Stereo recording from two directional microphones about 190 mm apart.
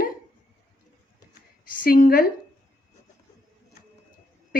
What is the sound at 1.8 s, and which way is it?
Speech, 50° left (ahead or behind).